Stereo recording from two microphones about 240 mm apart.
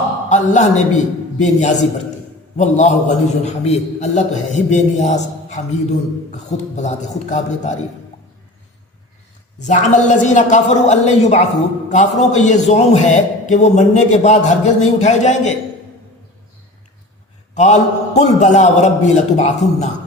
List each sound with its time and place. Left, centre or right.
0.3 s a man's voice: left
6.7 s a man's voice: left
9.6 s a man's voice: left
17.5 s a man's voice: left